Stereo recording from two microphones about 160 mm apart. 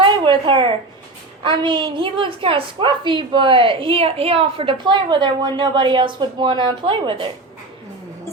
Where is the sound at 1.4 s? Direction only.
30° right (ahead or behind).